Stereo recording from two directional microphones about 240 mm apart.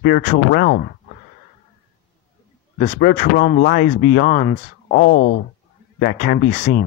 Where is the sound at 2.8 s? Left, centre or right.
Left.